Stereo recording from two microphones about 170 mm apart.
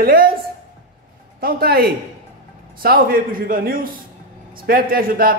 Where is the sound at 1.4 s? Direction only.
65° right (ahead or behind).